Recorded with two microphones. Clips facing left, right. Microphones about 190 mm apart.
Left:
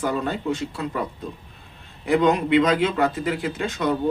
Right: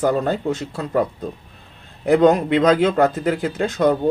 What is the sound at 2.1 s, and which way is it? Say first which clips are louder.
Speech: right 4 dB; 40° right (ahead or behind).